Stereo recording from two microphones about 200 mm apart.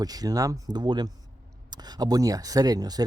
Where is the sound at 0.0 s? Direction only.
20° right (ahead or behind).